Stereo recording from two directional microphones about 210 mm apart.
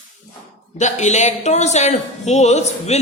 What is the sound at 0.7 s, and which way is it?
Speech, 35° left (ahead or behind).